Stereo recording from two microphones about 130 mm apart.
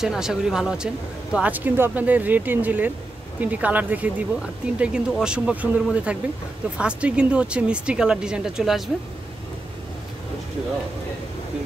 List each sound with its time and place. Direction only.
0.0 s speech: 5° right (ahead or behind)